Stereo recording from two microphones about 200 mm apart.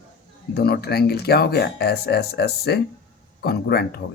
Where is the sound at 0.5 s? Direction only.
50° left (ahead or behind).